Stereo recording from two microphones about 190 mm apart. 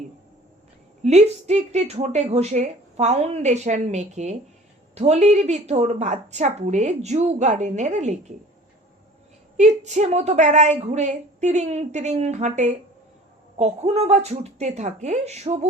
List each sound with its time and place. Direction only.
1.0 s a woman's voice: 35° right (ahead or behind)
9.6 s a woman's voice: 35° right (ahead or behind)